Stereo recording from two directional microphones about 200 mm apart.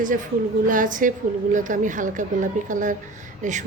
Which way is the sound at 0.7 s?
40° right (ahead or behind).